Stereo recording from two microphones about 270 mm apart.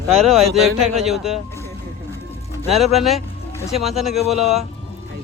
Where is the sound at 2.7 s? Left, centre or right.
Centre.